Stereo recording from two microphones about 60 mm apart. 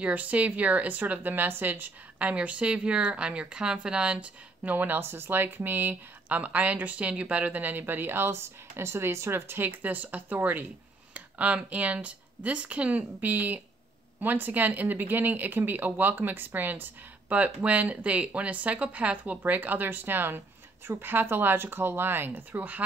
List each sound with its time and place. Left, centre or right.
0.0 s a woman's voice: right